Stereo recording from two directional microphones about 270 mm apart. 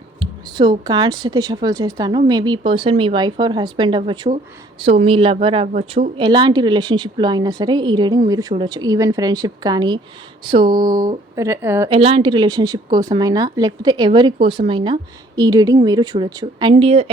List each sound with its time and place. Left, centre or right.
0.2 s a woman's voice: centre
11.9 s speech: right